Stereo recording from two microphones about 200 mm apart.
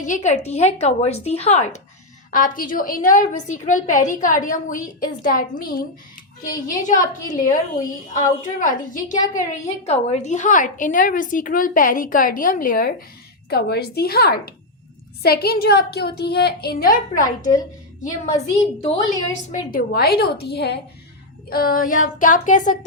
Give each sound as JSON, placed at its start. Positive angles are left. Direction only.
{"t": 0.0, "sound": "a woman's voice", "side_deg": 35}
{"t": 18.8, "sound": "a woman's voice", "side_deg": 35}
{"t": 19.9, "sound": "a woman's voice", "side_deg": 50}